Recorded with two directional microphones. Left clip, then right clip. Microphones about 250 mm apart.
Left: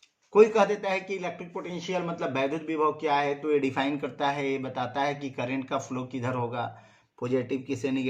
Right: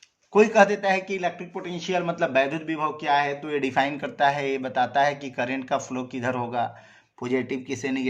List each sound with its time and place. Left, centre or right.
0.3 s a man's voice: right